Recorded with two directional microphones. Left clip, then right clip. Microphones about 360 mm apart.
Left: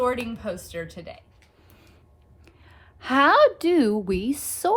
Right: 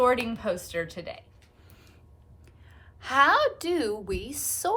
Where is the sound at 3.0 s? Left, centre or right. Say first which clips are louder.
Left 4 dB; left.